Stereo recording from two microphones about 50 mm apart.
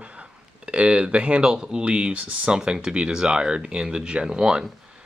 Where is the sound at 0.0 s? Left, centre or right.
Right.